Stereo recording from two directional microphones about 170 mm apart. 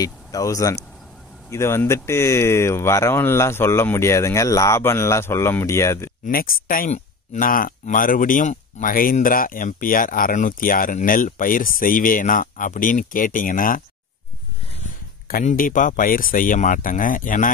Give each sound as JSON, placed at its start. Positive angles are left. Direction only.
{"t": 0.0, "sound": "speech", "side_deg": 20}
{"t": 6.2, "sound": "speech", "side_deg": 55}
{"t": 15.2, "sound": "speech", "side_deg": 55}